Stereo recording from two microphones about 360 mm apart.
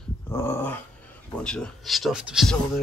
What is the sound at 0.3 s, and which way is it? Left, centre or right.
Dog, centre.